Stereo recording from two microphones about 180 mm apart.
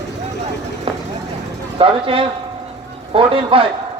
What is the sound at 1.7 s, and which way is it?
A man's voice, 30° right (ahead or behind).